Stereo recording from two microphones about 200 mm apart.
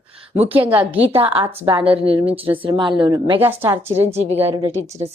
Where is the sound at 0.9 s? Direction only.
25° right (ahead or behind).